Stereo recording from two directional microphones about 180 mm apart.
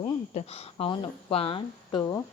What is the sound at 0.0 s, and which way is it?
Speech, 35° left (ahead or behind).